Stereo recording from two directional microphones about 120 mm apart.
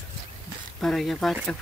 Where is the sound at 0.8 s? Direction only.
Centre (ahead or behind).